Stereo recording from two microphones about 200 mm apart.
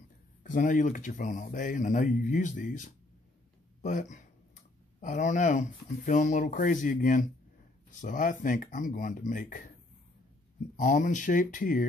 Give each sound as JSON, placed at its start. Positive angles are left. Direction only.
{"t": 0.4, "sound": "speech", "side_deg": 40}
{"t": 10.8, "sound": "speech", "side_deg": 40}